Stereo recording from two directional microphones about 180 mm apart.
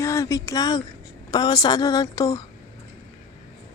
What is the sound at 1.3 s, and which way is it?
A woman's voice, 20° left (ahead or behind).